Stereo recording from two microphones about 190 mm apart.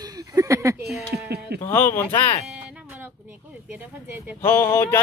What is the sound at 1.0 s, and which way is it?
Speech, 60° right (ahead or behind).